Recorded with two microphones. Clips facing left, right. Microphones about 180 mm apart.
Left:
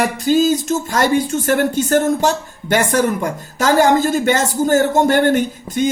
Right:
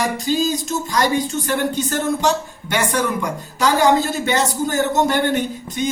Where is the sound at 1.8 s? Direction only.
45° left (ahead or behind).